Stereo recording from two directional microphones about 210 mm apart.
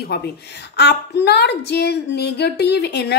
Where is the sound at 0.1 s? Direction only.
50° left (ahead or behind).